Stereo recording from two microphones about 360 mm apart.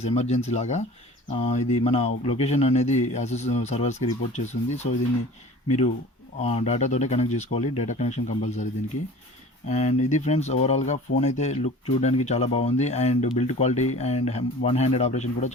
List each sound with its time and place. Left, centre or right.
0.0 s speech: centre
6.4 s speech: centre
9.6 s speech: centre